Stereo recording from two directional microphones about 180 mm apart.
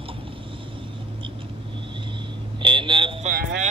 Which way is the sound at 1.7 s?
25° right (ahead or behind).